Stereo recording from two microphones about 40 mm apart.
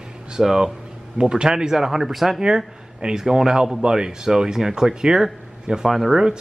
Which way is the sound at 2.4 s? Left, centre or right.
Right.